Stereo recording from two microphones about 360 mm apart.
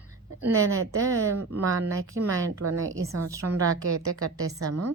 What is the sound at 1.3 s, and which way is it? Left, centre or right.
A woman's voice, right.